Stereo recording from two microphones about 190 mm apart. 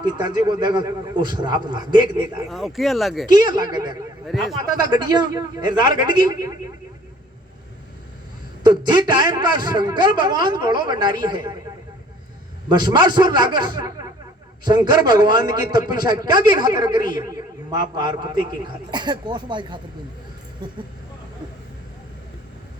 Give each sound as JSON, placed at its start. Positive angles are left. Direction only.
{"t": 0.0, "sound": "a man's voice", "side_deg": -20}
{"t": 2.5, "sound": "speech", "side_deg": 0}
{"t": 3.3, "sound": "a man's voice", "side_deg": -20}
{"t": 4.3, "sound": "speech", "side_deg": 0}
{"t": 4.9, "sound": "a man's voice", "side_deg": -20}
{"t": 8.6, "sound": "a man's voice", "side_deg": -20}
{"t": 12.6, "sound": "a man's voice", "side_deg": -20}